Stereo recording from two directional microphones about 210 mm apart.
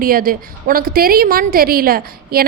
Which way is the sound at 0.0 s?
45° right (ahead or behind).